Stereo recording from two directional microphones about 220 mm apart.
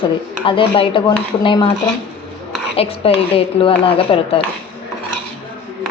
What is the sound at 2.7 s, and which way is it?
A woman's voice, 25° left (ahead or behind).